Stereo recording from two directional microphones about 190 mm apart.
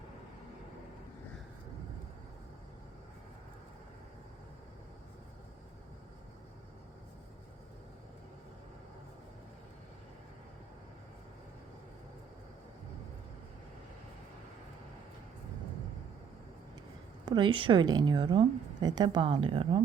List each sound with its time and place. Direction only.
17.2 s a woman's voice: 25° right (ahead or behind)